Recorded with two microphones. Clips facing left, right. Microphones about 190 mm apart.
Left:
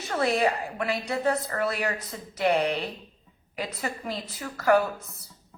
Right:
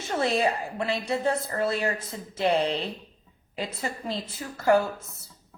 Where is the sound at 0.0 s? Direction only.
25° right (ahead or behind).